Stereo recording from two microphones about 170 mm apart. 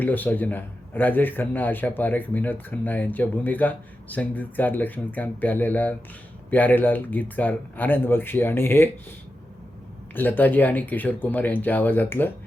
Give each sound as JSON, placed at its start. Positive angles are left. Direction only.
{"t": 0.0, "sound": "a man's voice", "side_deg": 10}
{"t": 10.2, "sound": "a man's voice", "side_deg": 10}